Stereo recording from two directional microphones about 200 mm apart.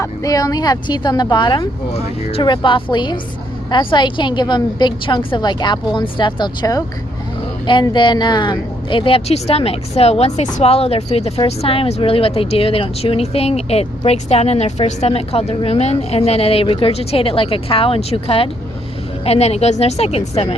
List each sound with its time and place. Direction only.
0.0 s a woman's voice: 15° left (ahead or behind)